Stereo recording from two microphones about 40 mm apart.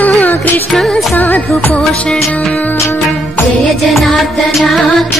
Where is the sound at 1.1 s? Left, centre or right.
Left.